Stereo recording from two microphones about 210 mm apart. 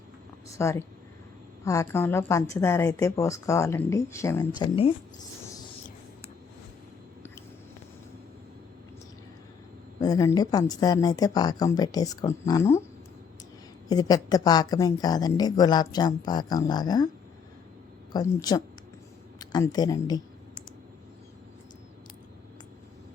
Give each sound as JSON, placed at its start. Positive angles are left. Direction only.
{"t": 0.4, "sound": "a woman's voice", "side_deg": 15}
{"t": 10.0, "sound": "a woman's voice", "side_deg": 15}
{"t": 13.8, "sound": "a woman's voice", "side_deg": 20}
{"t": 18.1, "sound": "a woman's voice", "side_deg": 20}